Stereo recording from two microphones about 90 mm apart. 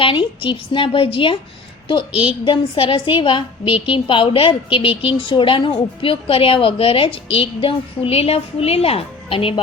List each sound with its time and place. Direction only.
0.0 s a woman's voice: 65° left (ahead or behind)
2.2 s a woman's voice: 70° left (ahead or behind); by 9.6 s 90° left